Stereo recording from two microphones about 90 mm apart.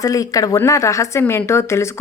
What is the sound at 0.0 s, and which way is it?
A woman's voice, 40° left (ahead or behind).